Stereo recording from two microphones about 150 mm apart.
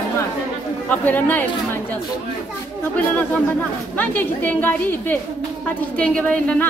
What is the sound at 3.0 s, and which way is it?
A woman's voice, 10° left (ahead or behind).